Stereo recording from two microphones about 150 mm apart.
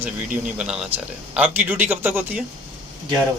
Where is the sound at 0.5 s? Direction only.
5° right (ahead or behind).